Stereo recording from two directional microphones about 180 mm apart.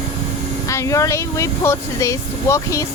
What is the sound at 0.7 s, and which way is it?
Speech, 15° left (ahead or behind).